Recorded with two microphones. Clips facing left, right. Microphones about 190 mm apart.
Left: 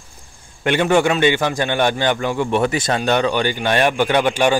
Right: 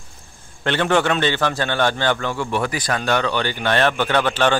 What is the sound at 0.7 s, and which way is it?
A man's voice, 10° left (ahead or behind).